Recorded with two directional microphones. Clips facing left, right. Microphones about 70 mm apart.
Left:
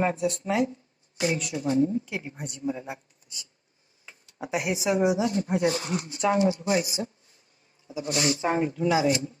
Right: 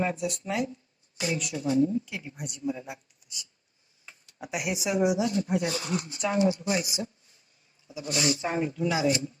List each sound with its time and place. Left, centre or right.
0.0 s a woman's voice: left
7.9 s a man's voice: left
8.3 s a woman's voice: left